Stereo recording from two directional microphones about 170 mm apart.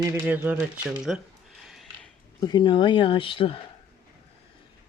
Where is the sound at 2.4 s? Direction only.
25° left (ahead or behind).